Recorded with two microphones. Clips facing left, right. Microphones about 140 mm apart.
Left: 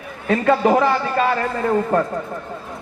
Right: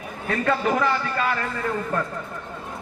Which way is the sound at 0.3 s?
25° left (ahead or behind).